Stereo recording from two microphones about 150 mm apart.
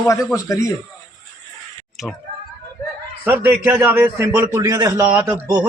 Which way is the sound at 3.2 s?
15° right (ahead or behind).